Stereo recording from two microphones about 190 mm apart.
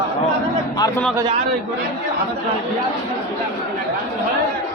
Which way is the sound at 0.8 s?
15° left (ahead or behind).